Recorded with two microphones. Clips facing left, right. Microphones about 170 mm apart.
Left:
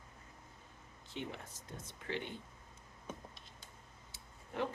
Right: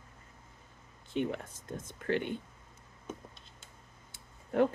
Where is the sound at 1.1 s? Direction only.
55° right (ahead or behind).